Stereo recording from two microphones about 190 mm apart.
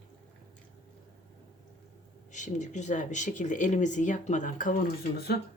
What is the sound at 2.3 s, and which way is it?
Speech, 40° left (ahead or behind).